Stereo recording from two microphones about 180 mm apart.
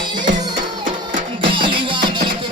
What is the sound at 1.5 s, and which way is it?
Music, 30° right (ahead or behind).